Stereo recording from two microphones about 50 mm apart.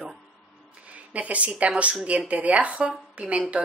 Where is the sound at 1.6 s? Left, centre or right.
Right.